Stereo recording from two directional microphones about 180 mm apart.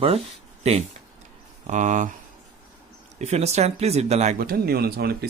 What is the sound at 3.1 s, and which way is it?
Speech, 40° right (ahead or behind).